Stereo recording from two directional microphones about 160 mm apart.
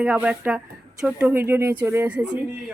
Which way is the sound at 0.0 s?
5° right (ahead or behind).